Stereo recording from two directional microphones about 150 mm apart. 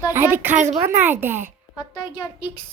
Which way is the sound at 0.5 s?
55° right (ahead or behind).